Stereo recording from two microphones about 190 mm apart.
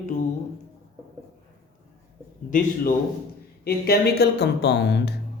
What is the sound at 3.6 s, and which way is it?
Speech, 55° left (ahead or behind).